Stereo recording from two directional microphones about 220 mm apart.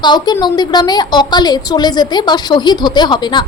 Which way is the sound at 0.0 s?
20° left (ahead or behind).